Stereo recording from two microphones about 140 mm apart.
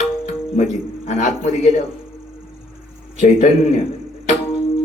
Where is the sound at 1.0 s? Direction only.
60° left (ahead or behind).